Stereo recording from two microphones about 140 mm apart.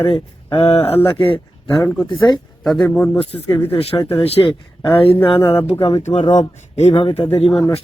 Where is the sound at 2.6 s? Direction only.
Centre (ahead or behind).